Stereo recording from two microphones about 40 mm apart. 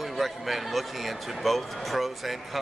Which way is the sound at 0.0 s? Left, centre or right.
Centre.